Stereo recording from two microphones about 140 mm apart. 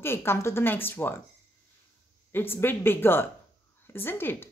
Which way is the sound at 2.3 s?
15° left (ahead or behind).